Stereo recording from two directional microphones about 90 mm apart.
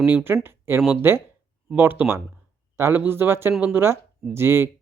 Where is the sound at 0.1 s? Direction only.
20° right (ahead or behind).